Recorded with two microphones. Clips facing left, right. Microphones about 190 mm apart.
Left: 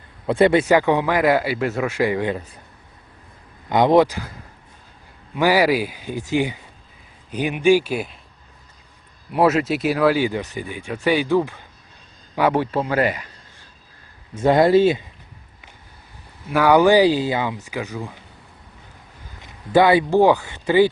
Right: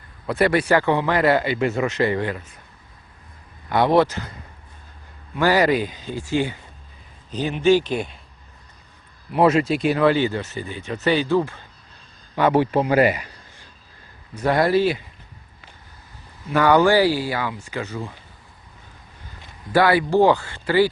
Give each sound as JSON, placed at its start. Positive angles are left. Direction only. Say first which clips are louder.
{"t": 0.3, "sound": "speech", "louder": "left 3 dB", "side_deg": 25}
{"t": 2.3, "sound": "speech", "louder": "left 5 dB", "side_deg": 35}
{"t": 3.7, "sound": "speech", "louder": "left 2 dB", "side_deg": 20}
{"t": 9.3, "sound": "speech", "louder": "even", "side_deg": 5}
{"t": 12.5, "sound": "speech", "louder": "right 3 dB", "side_deg": -15}
{"t": 14.3, "sound": "speech", "louder": "left 4 dB", "side_deg": 25}
{"t": 16.5, "sound": "speech", "louder": "left 2 dB", "side_deg": 10}
{"t": 19.7, "sound": "speech", "louder": "left 2 dB", "side_deg": 20}